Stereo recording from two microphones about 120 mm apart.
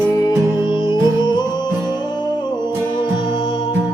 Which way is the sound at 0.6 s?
40° left (ahead or behind).